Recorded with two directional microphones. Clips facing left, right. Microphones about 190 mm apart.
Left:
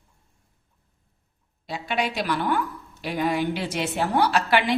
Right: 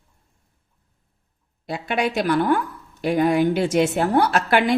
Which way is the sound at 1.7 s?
50° right (ahead or behind).